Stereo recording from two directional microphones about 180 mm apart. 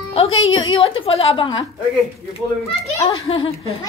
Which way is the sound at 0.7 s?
30° left (ahead or behind).